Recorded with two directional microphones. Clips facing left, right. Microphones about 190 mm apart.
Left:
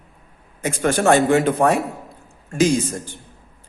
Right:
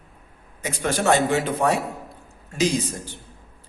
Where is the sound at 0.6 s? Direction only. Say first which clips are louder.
Left 5 dB; 50° left (ahead or behind).